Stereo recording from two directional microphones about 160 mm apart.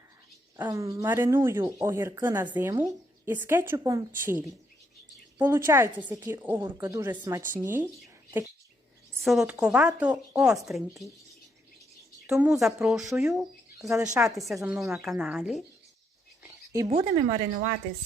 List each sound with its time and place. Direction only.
0.5 s a woman's voice: 20° right (ahead or behind)
9.2 s speech: centre (ahead or behind)
12.2 s speech: 10° right (ahead or behind)
17.0 s speech: 45° right (ahead or behind)